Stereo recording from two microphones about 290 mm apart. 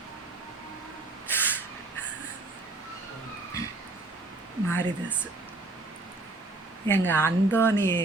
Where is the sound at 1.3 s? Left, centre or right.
Centre.